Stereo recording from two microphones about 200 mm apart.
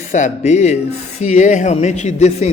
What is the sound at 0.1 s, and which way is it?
Speech, 35° left (ahead or behind).